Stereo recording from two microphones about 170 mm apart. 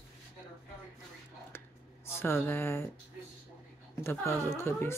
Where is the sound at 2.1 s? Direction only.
15° left (ahead or behind).